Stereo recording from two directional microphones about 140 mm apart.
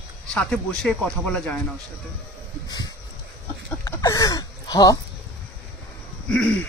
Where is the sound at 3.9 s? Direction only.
25° left (ahead or behind).